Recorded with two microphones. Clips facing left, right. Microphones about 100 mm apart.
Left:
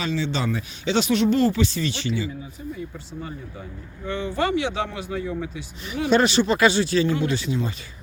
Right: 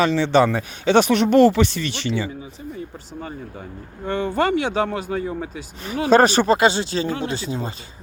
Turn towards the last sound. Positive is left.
turn(degrees=-35)  # may be behind; listen again after turning